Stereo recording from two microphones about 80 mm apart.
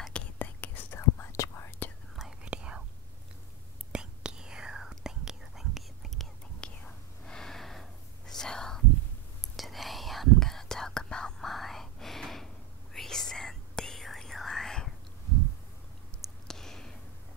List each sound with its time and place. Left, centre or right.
0.1 s whispering: left
2.4 s whispering: centre
3.9 s whispering: centre
6.6 s whispering: centre
16.4 s a sound: centre